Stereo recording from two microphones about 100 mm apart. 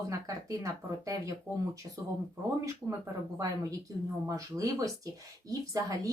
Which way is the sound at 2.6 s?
35° right (ahead or behind).